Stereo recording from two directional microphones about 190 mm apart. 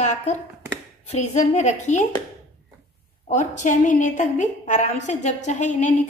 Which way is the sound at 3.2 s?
40° left (ahead or behind).